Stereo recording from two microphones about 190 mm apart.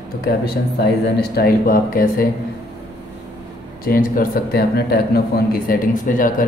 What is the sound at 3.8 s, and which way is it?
Speech, 45° left (ahead or behind).